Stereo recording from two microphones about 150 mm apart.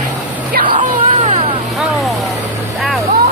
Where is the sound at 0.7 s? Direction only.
50° right (ahead or behind).